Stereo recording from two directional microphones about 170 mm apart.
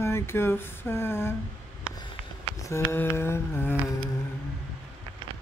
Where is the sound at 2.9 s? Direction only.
15° left (ahead or behind).